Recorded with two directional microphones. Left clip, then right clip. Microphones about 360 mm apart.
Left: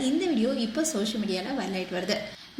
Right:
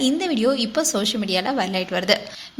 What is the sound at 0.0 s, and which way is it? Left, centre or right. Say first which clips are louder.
A woman's voice: right 6 dB; right.